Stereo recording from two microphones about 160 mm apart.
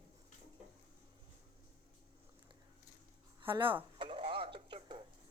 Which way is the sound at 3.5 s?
30° right (ahead or behind).